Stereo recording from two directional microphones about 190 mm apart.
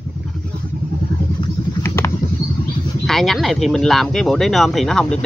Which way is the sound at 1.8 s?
15° left (ahead or behind).